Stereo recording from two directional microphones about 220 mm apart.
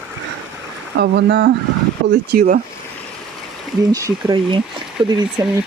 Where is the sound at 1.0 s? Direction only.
50° right (ahead or behind).